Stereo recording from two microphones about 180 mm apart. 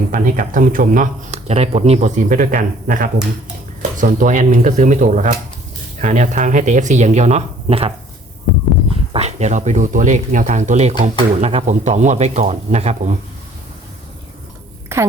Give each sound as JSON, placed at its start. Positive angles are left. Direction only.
{"t": 0.1, "sound": "speech", "side_deg": -45}
{"t": 9.1, "sound": "speech", "side_deg": -40}
{"t": 14.9, "sound": "a woman's voice", "side_deg": -15}